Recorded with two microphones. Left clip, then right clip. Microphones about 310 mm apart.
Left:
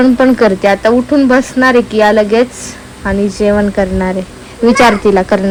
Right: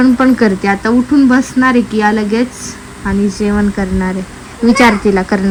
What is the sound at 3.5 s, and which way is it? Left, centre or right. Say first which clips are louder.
Speech: left 5 dB; left.